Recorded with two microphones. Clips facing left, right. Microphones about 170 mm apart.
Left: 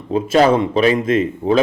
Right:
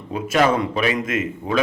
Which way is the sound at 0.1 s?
30° left (ahead or behind).